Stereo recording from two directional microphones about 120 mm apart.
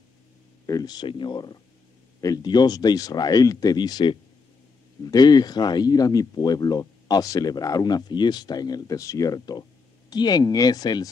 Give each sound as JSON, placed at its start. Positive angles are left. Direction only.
{"t": 0.7, "sound": "speech", "side_deg": 30}